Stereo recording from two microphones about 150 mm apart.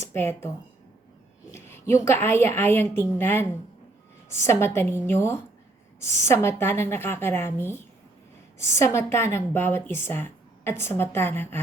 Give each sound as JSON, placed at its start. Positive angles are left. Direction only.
{"t": 0.1, "sound": "a woman's voice", "side_deg": 15}